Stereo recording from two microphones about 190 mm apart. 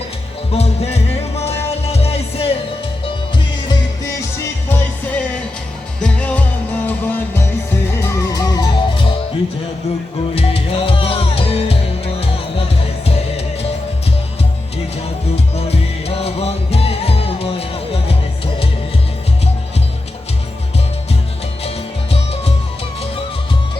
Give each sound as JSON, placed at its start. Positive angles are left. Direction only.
{"t": 0.5, "sound": "music", "side_deg": 35}
{"t": 3.7, "sound": "music", "side_deg": 15}
{"t": 10.3, "sound": "music", "side_deg": 30}
{"t": 15.5, "sound": "music", "side_deg": 35}
{"t": 22.1, "sound": "music", "side_deg": 30}